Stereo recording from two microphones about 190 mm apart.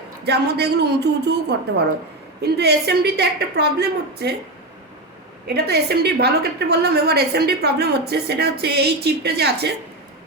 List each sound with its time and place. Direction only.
0.3 s a woman's voice: 60° right (ahead or behind)
5.5 s a woman's voice: 55° right (ahead or behind)